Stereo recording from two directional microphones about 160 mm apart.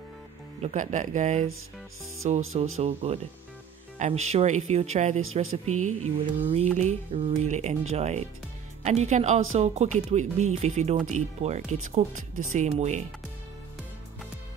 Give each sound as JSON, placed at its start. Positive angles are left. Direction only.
{"t": 0.6, "sound": "speech", "side_deg": -45}